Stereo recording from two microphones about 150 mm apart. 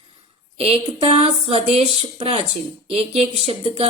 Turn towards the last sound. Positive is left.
turn(degrees=-45)  # may be behind; listen again after turning